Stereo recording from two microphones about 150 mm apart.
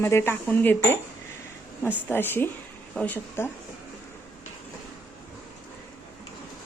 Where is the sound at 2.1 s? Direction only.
15° left (ahead or behind).